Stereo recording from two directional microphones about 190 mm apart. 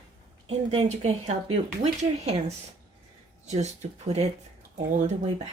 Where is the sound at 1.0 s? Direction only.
35° right (ahead or behind).